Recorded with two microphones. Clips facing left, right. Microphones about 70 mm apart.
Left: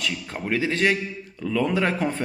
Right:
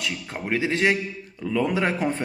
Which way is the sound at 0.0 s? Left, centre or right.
Centre.